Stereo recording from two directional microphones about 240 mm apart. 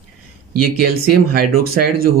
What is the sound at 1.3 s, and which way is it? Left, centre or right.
Speech, right.